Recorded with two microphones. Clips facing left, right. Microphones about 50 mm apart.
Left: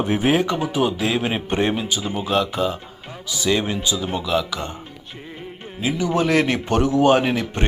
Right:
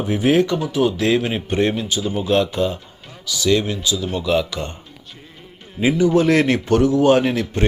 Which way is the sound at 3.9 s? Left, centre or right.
Centre.